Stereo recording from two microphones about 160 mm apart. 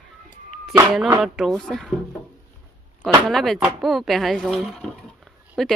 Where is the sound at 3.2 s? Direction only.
Centre (ahead or behind).